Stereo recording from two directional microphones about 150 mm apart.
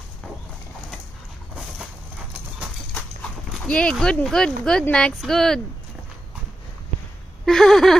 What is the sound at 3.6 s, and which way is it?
Speech, 5° left (ahead or behind).